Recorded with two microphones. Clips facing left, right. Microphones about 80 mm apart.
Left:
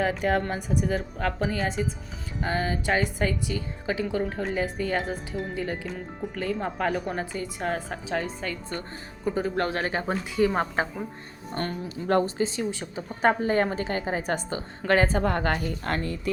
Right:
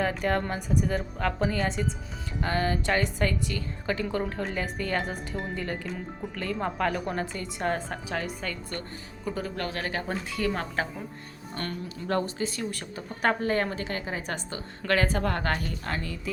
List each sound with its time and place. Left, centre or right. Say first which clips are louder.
0.0 s a woman's voice: left 2 dB; centre
9.2 s speech: left 6 dB; left
10.1 s speech: left 7 dB; centre
11.5 s speech: left 4 dB; left
14.8 s speech: left 3 dB; left
15.8 s speech: left 4 dB; left